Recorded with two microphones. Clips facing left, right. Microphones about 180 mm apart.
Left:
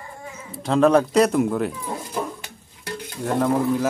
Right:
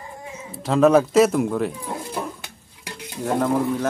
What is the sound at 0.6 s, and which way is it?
Speech, centre (ahead or behind).